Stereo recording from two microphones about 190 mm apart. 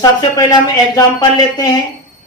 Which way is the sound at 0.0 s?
20° left (ahead or behind).